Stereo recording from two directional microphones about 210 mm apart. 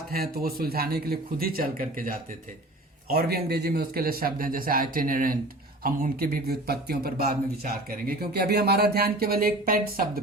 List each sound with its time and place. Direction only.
0.1 s speech: 45° right (ahead or behind)